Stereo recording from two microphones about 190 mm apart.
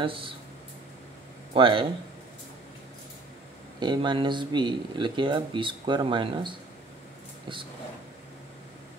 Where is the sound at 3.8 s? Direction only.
25° right (ahead or behind).